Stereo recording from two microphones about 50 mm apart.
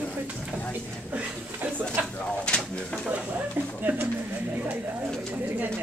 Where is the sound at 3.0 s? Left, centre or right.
Right.